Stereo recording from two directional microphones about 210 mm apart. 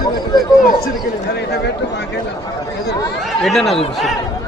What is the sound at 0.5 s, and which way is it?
Speech, 45° left (ahead or behind).